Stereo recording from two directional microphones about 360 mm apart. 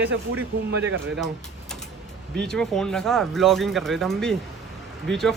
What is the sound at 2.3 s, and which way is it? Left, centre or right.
Speech, centre.